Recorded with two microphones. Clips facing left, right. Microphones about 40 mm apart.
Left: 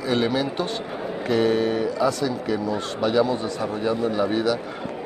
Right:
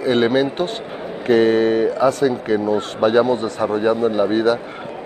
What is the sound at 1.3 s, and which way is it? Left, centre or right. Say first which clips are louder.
Speech: right 7 dB; right.